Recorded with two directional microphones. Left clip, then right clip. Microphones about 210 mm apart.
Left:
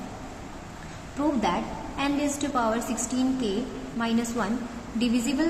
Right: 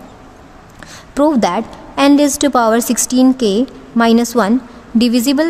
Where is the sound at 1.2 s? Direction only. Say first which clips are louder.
Right 13 dB; 60° right (ahead or behind).